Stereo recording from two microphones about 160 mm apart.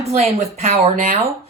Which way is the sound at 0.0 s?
40° right (ahead or behind).